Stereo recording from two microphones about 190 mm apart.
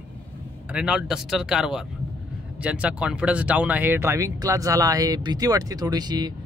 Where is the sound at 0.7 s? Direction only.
5° right (ahead or behind).